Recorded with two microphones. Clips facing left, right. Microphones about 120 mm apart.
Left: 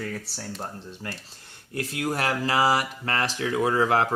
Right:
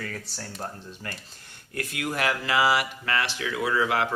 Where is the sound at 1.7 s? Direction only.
35° left (ahead or behind).